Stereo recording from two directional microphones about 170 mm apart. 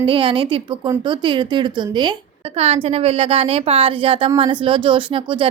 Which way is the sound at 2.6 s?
35° right (ahead or behind).